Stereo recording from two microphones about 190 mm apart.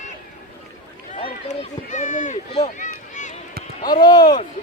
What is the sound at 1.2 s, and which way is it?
Run, 40° left (ahead or behind).